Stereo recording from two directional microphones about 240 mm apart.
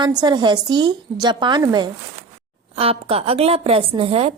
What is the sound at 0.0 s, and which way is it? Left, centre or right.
A woman's voice, centre.